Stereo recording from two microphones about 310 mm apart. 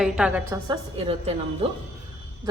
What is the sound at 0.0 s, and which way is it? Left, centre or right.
A woman's voice, centre.